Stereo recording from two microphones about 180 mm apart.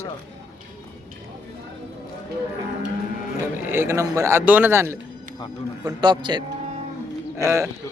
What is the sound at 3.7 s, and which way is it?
Speech, 15° right (ahead or behind).